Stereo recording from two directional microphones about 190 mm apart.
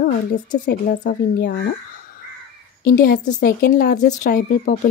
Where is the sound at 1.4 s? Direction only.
55° left (ahead or behind).